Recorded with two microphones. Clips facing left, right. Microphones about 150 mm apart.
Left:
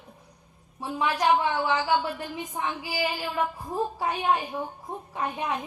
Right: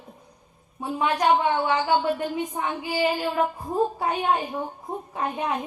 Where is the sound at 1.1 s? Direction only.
30° right (ahead or behind).